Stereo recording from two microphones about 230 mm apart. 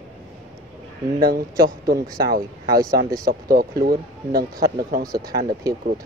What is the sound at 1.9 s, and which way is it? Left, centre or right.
Speech, right.